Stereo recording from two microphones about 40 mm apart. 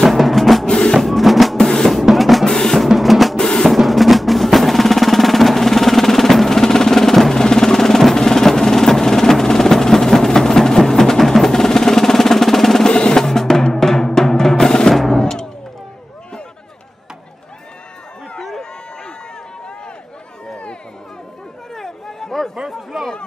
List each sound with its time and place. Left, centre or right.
0.0 s music: centre
0.7 s music: centre
0.9 s music: centre
1.6 s music: centre
2.0 s drum: centre
2.4 s music: centre
2.9 s drum: centre
3.3 s drum: centre
3.6 s music: centre
12.9 s drum: centre
18.4 s run: centre
21.7 s a sound: centre